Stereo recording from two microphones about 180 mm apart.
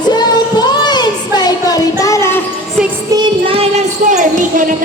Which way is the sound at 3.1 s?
25° right (ahead or behind).